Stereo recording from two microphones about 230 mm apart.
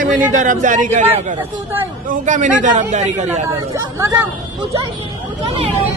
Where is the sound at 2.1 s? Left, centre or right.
Right.